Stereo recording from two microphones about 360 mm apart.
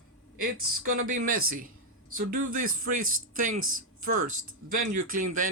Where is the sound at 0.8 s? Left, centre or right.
Right.